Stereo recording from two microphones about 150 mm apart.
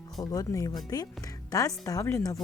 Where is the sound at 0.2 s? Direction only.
25° left (ahead or behind).